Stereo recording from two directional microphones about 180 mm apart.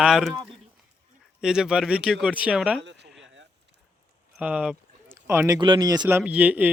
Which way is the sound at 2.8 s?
80° right.